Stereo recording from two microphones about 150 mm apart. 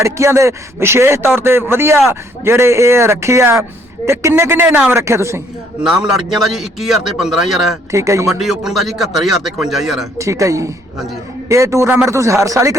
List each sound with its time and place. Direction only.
0.0 s a man's voice: 20° right (ahead or behind)
5.8 s a man's voice: 5° right (ahead or behind)
7.9 s a man's voice: 20° right (ahead or behind)
8.3 s a man's voice: centre (ahead or behind)
10.2 s a man's voice: 20° right (ahead or behind)